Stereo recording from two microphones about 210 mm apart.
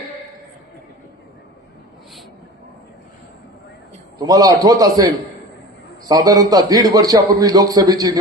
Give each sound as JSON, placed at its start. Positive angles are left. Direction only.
{"t": 4.2, "sound": "a man's voice", "side_deg": -15}